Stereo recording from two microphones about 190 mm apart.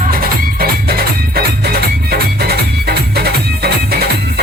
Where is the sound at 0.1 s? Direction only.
50° right (ahead or behind).